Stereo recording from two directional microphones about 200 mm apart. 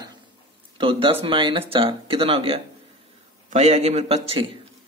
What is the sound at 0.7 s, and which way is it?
A man's voice, 25° right (ahead or behind).